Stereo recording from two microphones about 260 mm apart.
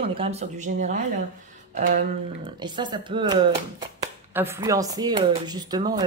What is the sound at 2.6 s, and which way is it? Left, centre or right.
Speech, centre.